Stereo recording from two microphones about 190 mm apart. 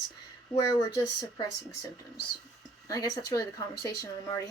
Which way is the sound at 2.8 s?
20° left (ahead or behind).